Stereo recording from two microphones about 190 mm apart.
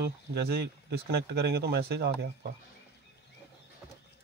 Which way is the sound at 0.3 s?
55° right (ahead or behind).